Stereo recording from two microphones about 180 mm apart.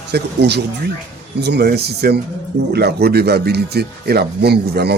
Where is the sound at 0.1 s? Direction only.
65° right (ahead or behind).